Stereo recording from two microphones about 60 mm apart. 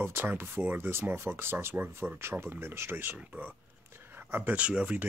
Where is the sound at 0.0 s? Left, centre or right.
Right.